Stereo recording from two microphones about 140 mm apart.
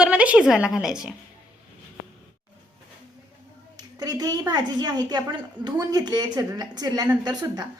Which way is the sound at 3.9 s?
30° right (ahead or behind).